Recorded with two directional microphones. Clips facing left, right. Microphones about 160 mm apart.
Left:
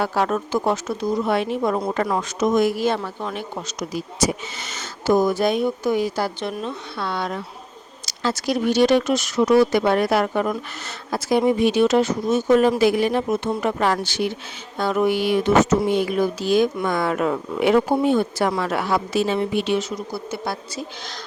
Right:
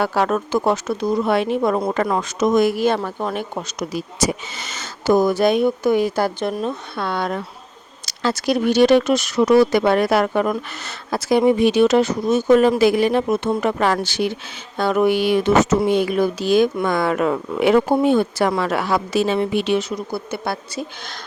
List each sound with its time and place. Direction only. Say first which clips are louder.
0.0 s speech: right 2 dB; 75° right (ahead or behind); by 3.8 s 50° right (ahead or behind)
3.9 s speech: even; 90° right; by 7.4 s 55° right (ahead or behind)
8.0 s speech: right 3 dB; 65° right (ahead or behind); by 14.3 s 90° right
14.8 s speech: right 3 dB; 70° right (ahead or behind)